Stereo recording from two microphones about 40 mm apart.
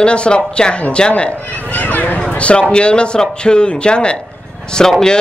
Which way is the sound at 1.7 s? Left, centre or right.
Left.